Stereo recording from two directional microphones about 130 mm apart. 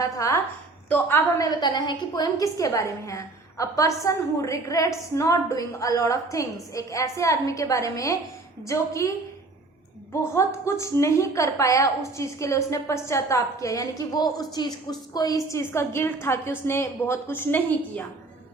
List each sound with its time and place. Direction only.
0.9 s a woman's voice: 10° left (ahead or behind)
1.4 s a woman's voice: 30° left (ahead or behind); by 18.0 s 15° left (ahead or behind)